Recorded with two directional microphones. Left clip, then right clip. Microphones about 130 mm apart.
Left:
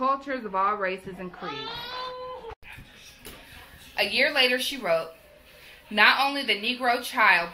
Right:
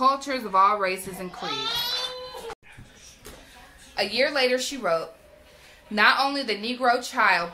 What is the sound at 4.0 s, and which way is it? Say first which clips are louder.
Speech: left 1 dB; 20° right (ahead or behind).